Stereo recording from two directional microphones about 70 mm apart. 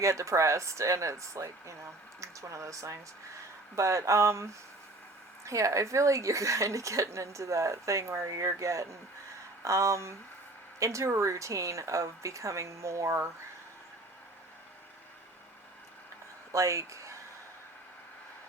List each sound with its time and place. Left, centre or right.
0.0 s speech: right
5.5 s speech: right
16.5 s speech: right